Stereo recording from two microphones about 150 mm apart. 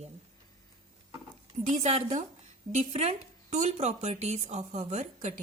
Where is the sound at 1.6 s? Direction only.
50° right (ahead or behind).